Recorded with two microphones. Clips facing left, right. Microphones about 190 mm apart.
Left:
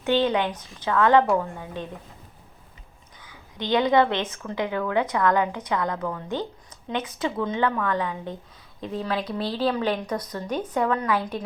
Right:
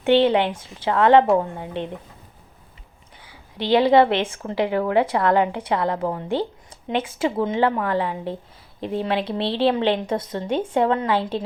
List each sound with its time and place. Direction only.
0.2 s a woman's voice: 25° right (ahead or behind)
3.7 s a woman's voice: 30° right (ahead or behind)